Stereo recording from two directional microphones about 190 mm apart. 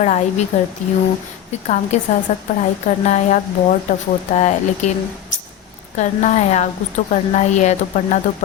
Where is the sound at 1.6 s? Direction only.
40° left (ahead or behind).